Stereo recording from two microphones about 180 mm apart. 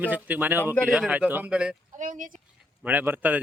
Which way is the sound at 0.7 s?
Centre (ahead or behind).